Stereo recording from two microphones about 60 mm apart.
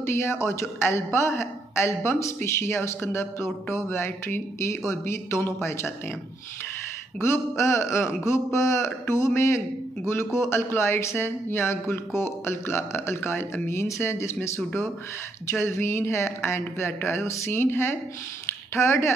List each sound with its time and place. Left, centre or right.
0.0 s speech: left
7.2 s speech: left
17.5 s speech: left